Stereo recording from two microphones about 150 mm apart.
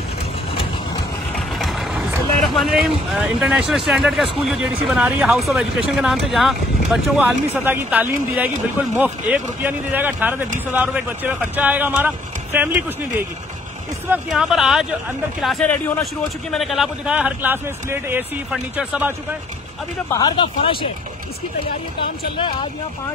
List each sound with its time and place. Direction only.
1.6 s vehicle: centre (ahead or behind)
2.5 s speech: centre (ahead or behind)
7.2 s speech: 15° right (ahead or behind)
14.1 s speech: centre (ahead or behind)
20.2 s speech: 30° left (ahead or behind)